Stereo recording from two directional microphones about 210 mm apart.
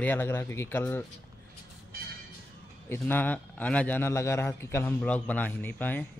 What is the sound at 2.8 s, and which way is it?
A man's voice, 10° left (ahead or behind).